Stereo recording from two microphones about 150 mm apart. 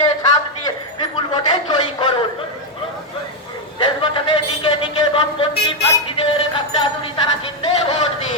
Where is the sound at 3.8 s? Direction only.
35° left (ahead or behind).